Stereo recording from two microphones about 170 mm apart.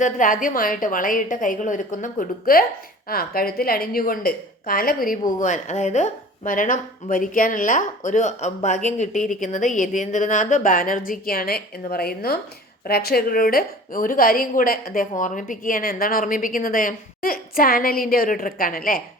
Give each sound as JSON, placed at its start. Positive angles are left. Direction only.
{"t": 0.0, "sound": "a woman's voice", "side_deg": 50}